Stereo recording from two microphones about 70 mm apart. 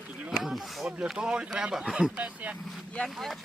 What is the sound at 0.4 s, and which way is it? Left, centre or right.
Speech, centre.